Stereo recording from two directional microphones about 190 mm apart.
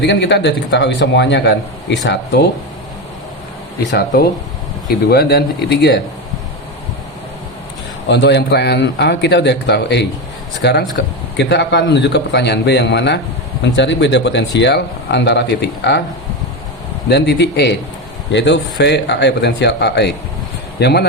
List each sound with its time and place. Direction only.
0.0 s a man's voice: 65° left (ahead or behind)
3.9 s speech: 55° left (ahead or behind)
8.0 s speech: 65° left (ahead or behind)
17.1 s speech: 60° left (ahead or behind)